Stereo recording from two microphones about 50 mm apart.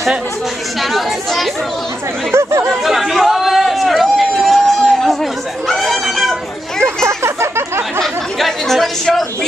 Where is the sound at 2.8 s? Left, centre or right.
Centre.